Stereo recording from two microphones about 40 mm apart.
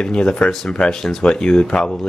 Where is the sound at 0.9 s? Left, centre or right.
Centre.